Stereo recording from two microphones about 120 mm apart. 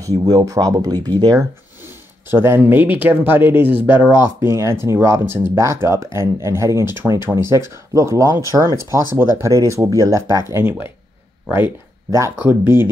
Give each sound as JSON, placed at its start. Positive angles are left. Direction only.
{"t": 0.0, "sound": "speech", "side_deg": -30}
{"t": 2.2, "sound": "speech", "side_deg": -20}